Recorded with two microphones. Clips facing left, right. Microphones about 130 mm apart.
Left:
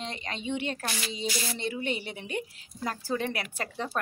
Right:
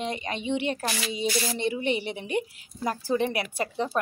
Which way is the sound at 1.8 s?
40° left (ahead or behind).